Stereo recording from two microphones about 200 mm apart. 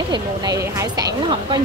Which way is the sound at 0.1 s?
20° right (ahead or behind).